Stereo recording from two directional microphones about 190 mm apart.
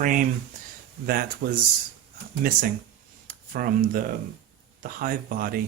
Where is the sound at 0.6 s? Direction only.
40° right (ahead or behind).